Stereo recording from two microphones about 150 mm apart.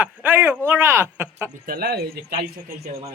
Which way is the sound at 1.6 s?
85° right.